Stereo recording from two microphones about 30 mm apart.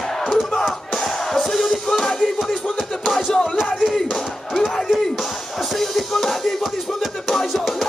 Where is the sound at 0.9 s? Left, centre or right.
Centre.